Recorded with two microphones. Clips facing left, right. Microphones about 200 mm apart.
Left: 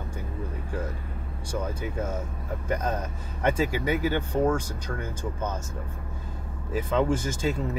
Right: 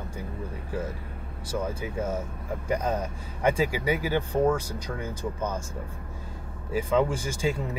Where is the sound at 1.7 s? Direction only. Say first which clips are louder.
Right 1 dB; 10° right (ahead or behind).